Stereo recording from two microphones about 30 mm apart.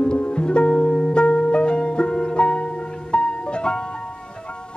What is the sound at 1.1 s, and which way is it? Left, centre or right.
Harp, left.